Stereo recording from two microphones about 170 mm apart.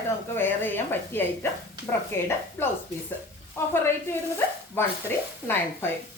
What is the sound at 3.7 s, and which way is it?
Speech, 15° left (ahead or behind).